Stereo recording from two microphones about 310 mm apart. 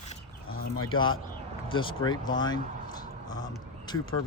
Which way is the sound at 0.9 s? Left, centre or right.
Centre.